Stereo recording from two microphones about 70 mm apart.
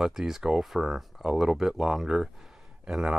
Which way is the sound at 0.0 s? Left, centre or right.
Centre.